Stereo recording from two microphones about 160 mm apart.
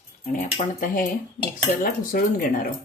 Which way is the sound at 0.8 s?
55° left (ahead or behind).